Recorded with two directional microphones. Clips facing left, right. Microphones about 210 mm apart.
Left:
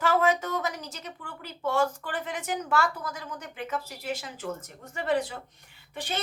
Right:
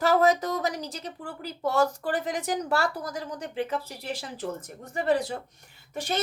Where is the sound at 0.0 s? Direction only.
40° right (ahead or behind).